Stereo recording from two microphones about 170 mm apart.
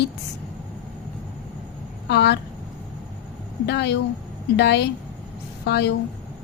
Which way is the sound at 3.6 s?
85° left.